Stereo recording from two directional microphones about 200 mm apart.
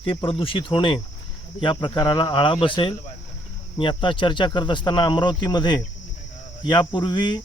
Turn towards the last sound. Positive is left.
turn(degrees=25)  # may be behind; listen again after turning